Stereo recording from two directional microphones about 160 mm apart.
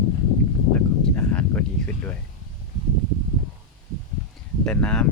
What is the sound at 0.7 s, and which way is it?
Speech, 10° left (ahead or behind).